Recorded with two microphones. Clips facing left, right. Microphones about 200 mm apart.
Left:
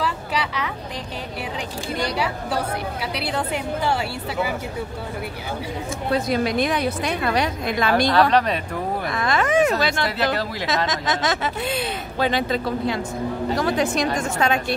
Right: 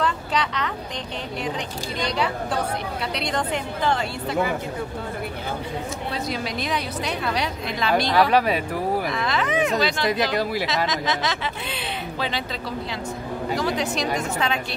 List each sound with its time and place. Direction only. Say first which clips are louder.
0.0 s a sound: right 1 dB; 10° left (ahead or behind)
2.0 s a woman's voice: even; 10° left (ahead or behind)
6.1 s speech: left 10 dB; 50° left (ahead or behind)
8.1 s speech: left 1 dB; 10° right (ahead or behind)
9.1 s speech: left 4 dB; 50° left (ahead or behind)
10.0 s speech: right 1 dB; 15° right (ahead or behind)
10.9 s speech: left 2 dB; 50° left (ahead or behind)